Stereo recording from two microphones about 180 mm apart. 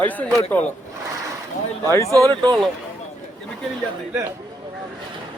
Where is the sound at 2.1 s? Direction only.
20° right (ahead or behind).